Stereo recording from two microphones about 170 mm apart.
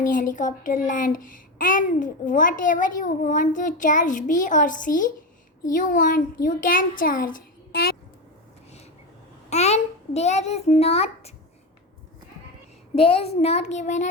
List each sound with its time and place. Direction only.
0.0 s a child's voice: 50° left (ahead or behind)
9.5 s a sound: 40° left (ahead or behind)
13.0 s a child's voice: 35° left (ahead or behind)